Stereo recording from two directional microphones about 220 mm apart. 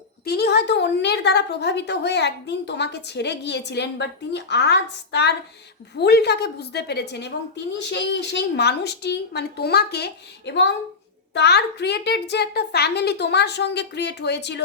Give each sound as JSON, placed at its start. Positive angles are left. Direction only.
{"t": 0.3, "sound": "a woman's voice", "side_deg": 50}